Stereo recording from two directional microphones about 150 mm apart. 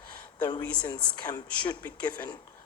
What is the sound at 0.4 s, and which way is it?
Speech, 30° left (ahead or behind).